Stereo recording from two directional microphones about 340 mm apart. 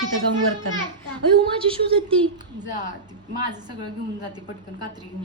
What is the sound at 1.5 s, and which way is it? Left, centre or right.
A woman's voice, centre.